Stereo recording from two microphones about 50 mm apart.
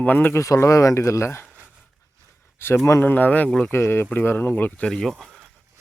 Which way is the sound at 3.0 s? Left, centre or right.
Left.